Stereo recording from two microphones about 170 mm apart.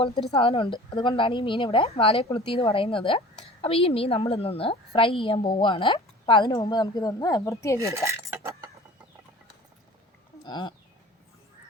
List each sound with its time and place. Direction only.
0.0 s a woman's voice: 35° left (ahead or behind); by 7.8 s 15° left (ahead or behind)
7.8 s cutlery: 15° right (ahead or behind)
10.4 s a woman's voice: 25° left (ahead or behind)